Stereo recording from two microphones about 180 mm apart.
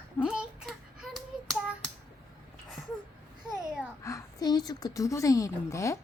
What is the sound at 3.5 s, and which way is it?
Babbling, 5° right (ahead or behind).